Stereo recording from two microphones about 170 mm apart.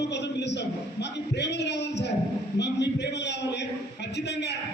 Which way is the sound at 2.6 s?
85° left.